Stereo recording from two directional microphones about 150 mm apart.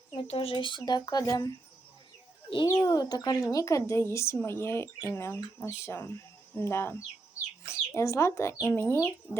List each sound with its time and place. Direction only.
0.1 s speech: 35° left (ahead or behind); by 9.4 s 15° left (ahead or behind)